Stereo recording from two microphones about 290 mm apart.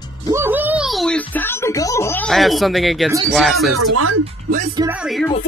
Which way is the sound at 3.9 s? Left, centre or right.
Right.